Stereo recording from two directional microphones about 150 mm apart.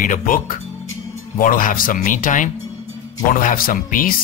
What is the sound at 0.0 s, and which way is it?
A man's voice, 65° left (ahead or behind).